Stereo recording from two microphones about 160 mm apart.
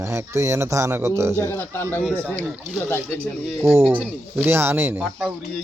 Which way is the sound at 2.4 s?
5° right (ahead or behind).